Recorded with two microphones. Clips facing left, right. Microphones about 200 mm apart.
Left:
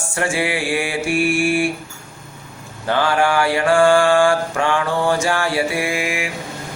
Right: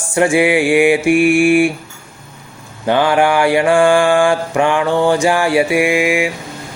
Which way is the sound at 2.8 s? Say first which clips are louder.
Right 5 dB; 15° right (ahead or behind).